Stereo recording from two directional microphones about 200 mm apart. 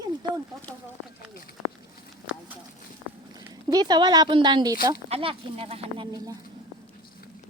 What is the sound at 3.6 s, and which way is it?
Speech, 20° right (ahead or behind).